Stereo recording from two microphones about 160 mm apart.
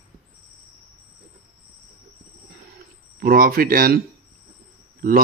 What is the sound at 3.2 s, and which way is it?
Speech, 65° right (ahead or behind).